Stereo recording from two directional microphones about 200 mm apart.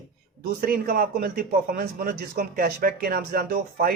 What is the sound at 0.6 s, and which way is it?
Speech, 45° right (ahead or behind).